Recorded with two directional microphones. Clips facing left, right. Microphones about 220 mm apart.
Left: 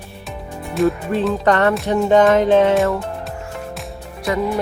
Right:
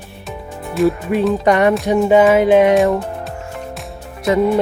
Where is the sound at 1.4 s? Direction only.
15° right (ahead or behind).